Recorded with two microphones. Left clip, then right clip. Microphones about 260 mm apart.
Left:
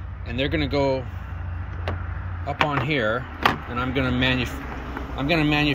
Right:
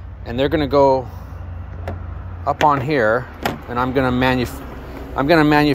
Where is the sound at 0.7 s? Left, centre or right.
Right.